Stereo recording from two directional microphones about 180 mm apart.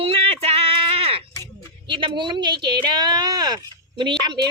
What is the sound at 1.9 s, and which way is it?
Speech, 25° right (ahead or behind).